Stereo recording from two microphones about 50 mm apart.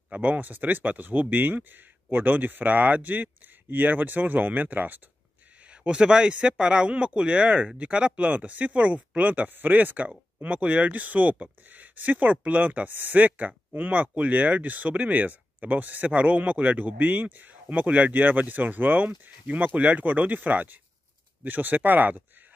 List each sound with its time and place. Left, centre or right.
0.1 s speech: right
5.7 s speech: centre; by 22.2 s right